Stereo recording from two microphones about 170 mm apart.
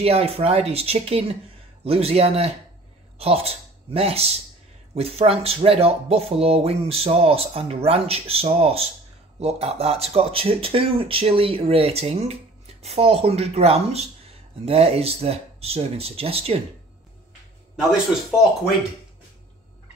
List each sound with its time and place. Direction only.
0.0 s speech: 35° right (ahead or behind)